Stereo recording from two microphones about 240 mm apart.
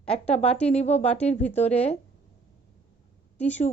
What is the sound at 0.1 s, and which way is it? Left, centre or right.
Speech, left.